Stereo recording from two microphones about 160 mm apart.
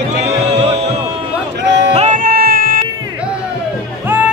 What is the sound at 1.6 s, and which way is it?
Music, 90° right.